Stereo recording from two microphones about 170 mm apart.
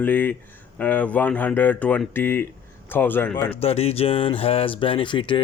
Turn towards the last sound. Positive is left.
turn(degrees=30)  # may be behind; listen again after turning